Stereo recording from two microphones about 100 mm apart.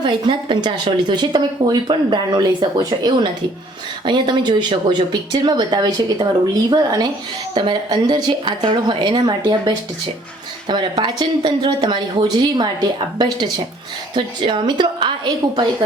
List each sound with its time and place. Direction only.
0.0 s speech: 55° right (ahead or behind)